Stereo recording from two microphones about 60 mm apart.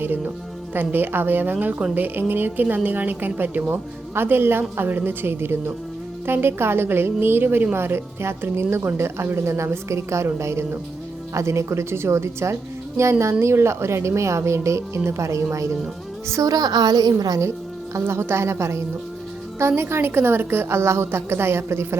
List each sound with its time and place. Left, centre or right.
0.9 s a woman's voice: right
16.3 s a woman's voice: right
18.0 s a woman's voice: right